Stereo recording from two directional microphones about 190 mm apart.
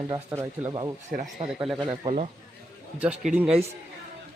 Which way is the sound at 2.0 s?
35° right (ahead or behind).